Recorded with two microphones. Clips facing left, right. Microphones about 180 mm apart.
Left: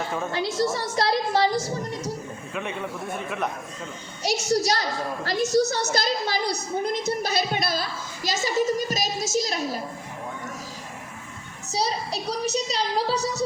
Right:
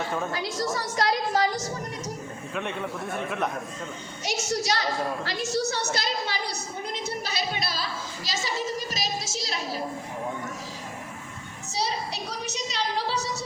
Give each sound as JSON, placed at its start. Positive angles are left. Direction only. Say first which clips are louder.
{"t": 0.3, "sound": "a woman's voice", "louder": "left 4 dB", "side_deg": 25}
{"t": 2.6, "sound": "a man's voice", "louder": "even", "side_deg": 0}
{"t": 4.2, "sound": "a woman's voice", "louder": "left 6 dB", "side_deg": 35}
{"t": 11.7, "sound": "a woman's voice", "louder": "left 3 dB", "side_deg": 40}